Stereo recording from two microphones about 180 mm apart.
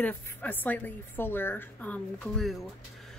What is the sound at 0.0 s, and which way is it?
A woman's voice, 10° left (ahead or behind).